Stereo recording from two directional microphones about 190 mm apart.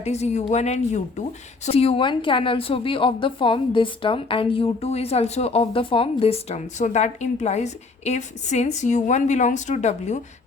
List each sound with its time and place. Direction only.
0.0 s a woman's voice: 35° left (ahead or behind)